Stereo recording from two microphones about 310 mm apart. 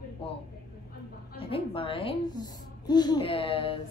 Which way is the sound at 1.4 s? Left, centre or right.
Centre.